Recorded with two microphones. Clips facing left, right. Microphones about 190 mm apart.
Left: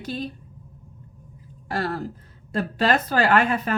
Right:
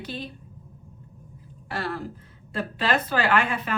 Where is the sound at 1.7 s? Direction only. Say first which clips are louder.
Left 4 dB; 40° left (ahead or behind).